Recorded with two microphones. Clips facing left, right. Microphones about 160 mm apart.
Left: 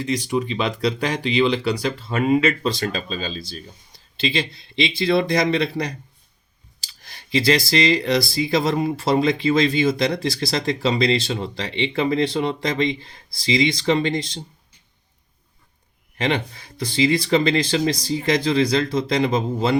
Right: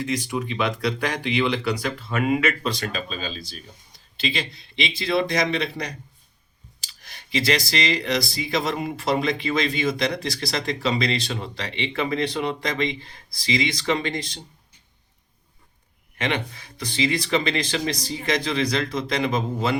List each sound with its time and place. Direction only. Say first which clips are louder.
0.3 s speech: left 3 dB; 30° left (ahead or behind)
16.1 s speech: left 4 dB; 30° left (ahead or behind)